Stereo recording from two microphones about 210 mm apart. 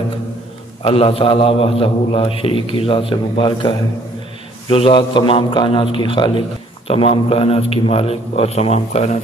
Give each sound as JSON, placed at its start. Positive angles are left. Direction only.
{"t": 0.8, "sound": "a man's voice", "side_deg": 25}